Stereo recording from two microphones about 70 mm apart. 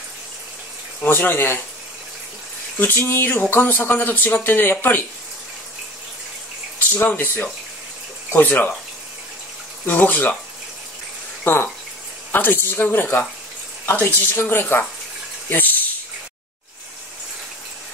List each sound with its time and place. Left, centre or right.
1.0 s speech: left
2.8 s speech: left
6.9 s speech: left
9.8 s speech: left
11.4 s a woman's voice: left
15.5 s a sound: left